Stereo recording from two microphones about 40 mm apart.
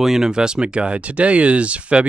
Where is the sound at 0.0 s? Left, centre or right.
Centre.